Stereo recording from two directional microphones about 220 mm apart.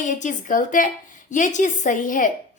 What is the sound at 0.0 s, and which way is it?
A woman's voice, 35° left (ahead or behind).